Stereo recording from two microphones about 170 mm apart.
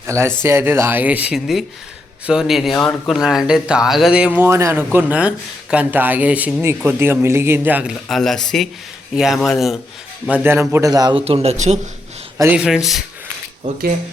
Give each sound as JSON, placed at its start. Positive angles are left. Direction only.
{"t": 0.1, "sound": "speech", "side_deg": -15}
{"t": 8.0, "sound": "speech", "side_deg": 0}
{"t": 11.3, "sound": "speech", "side_deg": -35}
{"t": 12.4, "sound": "speech", "side_deg": -10}
{"t": 13.6, "sound": "speech", "side_deg": -30}